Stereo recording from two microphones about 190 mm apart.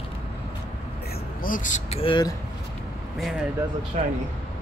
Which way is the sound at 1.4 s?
45° left (ahead or behind).